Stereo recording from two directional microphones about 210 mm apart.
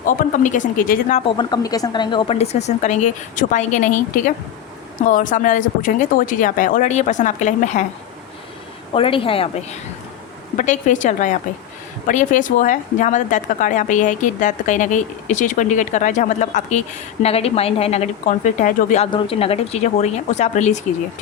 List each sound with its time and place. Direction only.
0.0 s speech: 40° left (ahead or behind)
1.4 s speech: 20° left (ahead or behind); by 7.9 s 35° left (ahead or behind)
8.9 s a woman's voice: 25° left (ahead or behind)
10.6 s a woman's voice: 35° left (ahead or behind)
19.1 s speech: 25° left (ahead or behind)